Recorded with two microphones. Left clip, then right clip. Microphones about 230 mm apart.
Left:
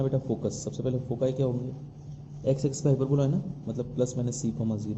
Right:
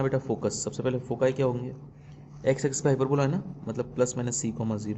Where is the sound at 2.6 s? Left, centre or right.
Right.